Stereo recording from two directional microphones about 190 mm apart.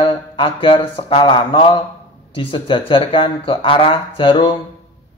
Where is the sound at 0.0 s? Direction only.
30° left (ahead or behind).